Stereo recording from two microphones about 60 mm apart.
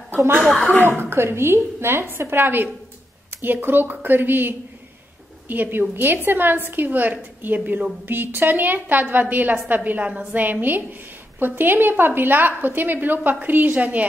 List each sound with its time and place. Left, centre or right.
1.1 s a woman's voice: right
3.3 s a sound: right
3.6 s a woman's voice: right